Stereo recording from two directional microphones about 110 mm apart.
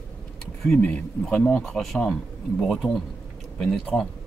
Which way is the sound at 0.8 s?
10° left (ahead or behind).